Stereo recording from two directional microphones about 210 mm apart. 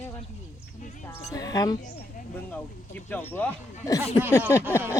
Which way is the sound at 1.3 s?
15° left (ahead or behind).